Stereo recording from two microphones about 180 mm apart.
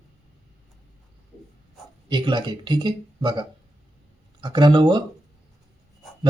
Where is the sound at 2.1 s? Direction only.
25° right (ahead or behind).